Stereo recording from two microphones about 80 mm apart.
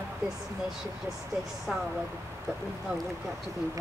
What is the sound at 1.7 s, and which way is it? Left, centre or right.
Speech, centre.